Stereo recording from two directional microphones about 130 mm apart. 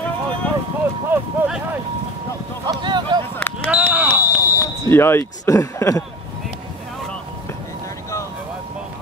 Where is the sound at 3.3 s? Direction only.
15° left (ahead or behind).